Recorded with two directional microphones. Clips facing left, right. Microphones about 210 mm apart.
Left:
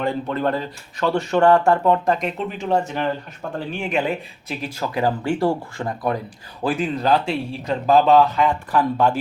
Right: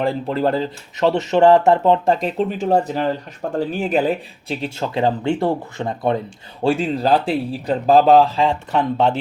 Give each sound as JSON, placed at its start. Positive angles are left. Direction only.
{"t": 0.0, "sound": "speech", "side_deg": -30}